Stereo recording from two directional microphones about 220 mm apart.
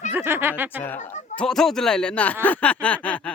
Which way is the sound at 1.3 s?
Centre (ahead or behind).